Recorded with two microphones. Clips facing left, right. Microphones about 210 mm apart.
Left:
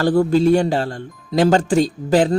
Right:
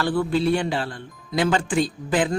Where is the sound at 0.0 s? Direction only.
45° left (ahead or behind).